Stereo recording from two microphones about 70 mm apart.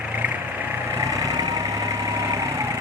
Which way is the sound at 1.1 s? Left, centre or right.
Right.